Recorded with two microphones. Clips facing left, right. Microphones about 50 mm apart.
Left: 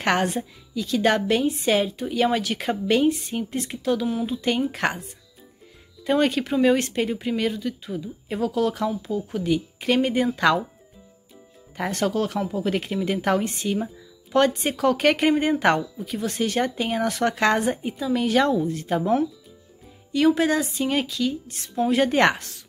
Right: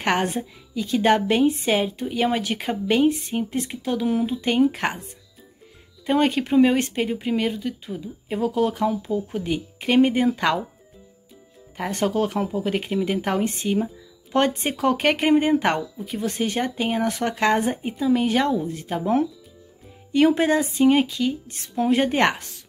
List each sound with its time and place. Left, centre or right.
0.0 s speech: centre
6.0 s speech: centre
11.9 s speech: centre
20.2 s speech: right